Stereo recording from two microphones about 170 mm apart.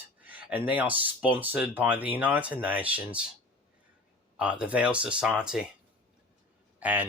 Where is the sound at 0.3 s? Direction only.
10° right (ahead or behind).